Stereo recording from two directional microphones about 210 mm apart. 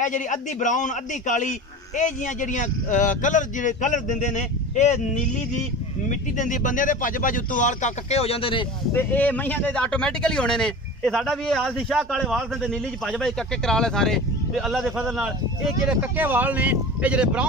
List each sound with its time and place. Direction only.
0.0 s a man's voice: 35° left (ahead or behind)
8.9 s a man's voice: 10° left (ahead or behind)